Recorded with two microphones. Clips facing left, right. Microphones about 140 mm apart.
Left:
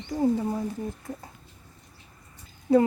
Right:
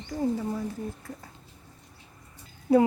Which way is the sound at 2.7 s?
5° right (ahead or behind).